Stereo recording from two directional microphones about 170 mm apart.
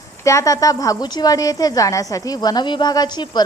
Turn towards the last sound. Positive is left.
turn(degrees=25)  # may be behind; listen again after turning